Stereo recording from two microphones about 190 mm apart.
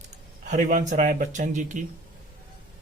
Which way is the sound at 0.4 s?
40° right (ahead or behind).